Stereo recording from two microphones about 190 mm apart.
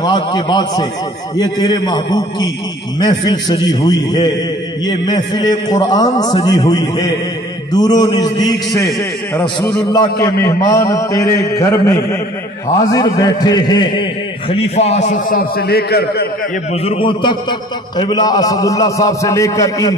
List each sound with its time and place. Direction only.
0.0 s a man's voice: 25° left (ahead or behind)
10.2 s a man's voice: 15° left (ahead or behind)
14.5 s a man's voice: 35° left (ahead or behind); by 16.3 s 55° left (ahead or behind)
16.8 s a man's voice: 30° left (ahead or behind)